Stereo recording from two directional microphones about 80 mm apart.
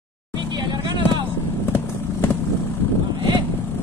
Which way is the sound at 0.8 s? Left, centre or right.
Right.